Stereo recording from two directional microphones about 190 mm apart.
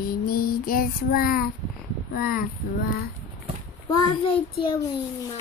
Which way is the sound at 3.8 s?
20° left (ahead or behind).